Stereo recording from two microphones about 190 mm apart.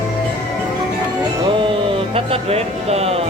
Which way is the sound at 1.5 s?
25° right (ahead or behind).